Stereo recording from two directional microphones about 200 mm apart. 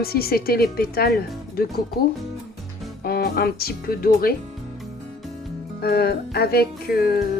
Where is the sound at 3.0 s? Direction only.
50° left (ahead or behind).